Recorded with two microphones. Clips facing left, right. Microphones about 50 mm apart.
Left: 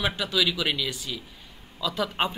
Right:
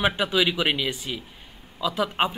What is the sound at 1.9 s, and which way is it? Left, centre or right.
Speech, centre.